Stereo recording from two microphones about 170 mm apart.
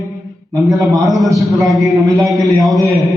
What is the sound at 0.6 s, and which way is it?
Speech, 20° right (ahead or behind).